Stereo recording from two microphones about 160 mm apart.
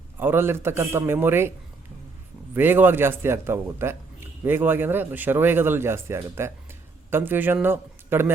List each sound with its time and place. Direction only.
0.2 s speech: 15° right (ahead or behind)
2.6 s a man's voice: 10° right (ahead or behind)